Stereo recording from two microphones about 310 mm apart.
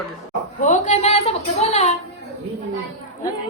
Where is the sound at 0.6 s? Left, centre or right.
Left.